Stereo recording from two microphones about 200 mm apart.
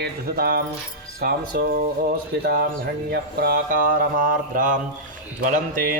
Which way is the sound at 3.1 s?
50° right (ahead or behind).